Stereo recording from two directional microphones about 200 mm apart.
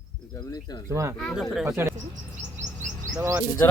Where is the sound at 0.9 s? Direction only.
15° right (ahead or behind).